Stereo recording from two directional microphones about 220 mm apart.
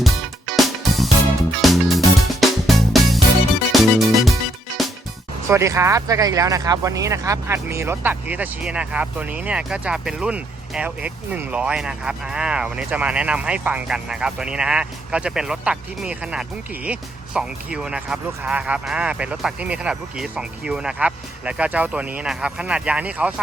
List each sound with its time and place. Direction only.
0.0 s music: centre (ahead or behind)
5.5 s speech: 15° right (ahead or behind)